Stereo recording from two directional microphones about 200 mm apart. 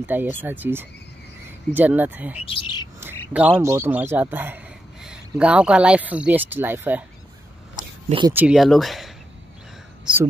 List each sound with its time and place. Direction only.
0.0 s speech: 10° right (ahead or behind)
2.4 s speech: 25° left (ahead or behind)
3.0 s a man's voice: 10° right (ahead or behind)
8.3 s speech: 5° right (ahead or behind)